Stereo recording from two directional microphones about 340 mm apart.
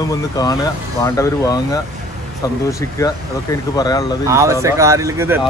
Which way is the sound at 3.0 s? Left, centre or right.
Centre.